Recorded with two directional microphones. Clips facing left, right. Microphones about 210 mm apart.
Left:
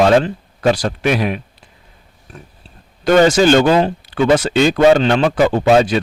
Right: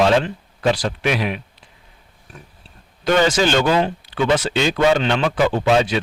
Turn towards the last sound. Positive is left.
turn(degrees=45)  # may be behind; listen again after turning